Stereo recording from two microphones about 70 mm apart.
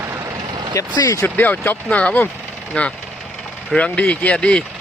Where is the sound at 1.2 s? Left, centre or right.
Left.